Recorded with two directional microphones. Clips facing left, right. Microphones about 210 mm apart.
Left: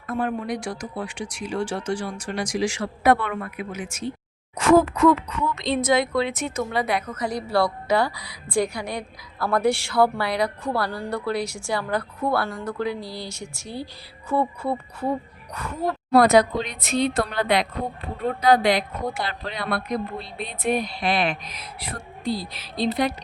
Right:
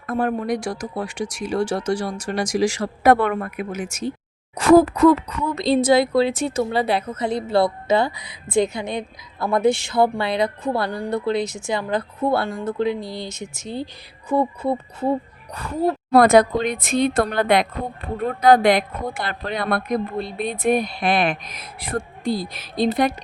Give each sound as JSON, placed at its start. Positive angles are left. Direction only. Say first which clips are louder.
{"t": 0.1, "sound": "speech", "louder": "right 4 dB", "side_deg": -45}
{"t": 15.5, "sound": "a woman's voice", "louder": "right 5 dB", "side_deg": -30}
{"t": 16.1, "sound": "speech", "louder": "right 2 dB", "side_deg": -50}